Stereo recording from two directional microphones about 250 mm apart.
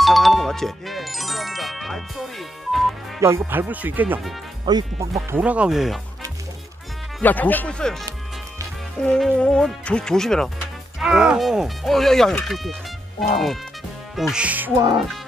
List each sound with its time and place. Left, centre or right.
0.0 s speech: centre
3.2 s speech: centre
4.7 s speech: centre
5.1 s speech: centre
7.2 s speech: centre
9.0 s speech: centre
14.1 s speech: centre